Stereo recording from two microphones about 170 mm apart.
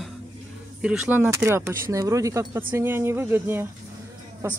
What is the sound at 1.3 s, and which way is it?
Speech, 15° right (ahead or behind).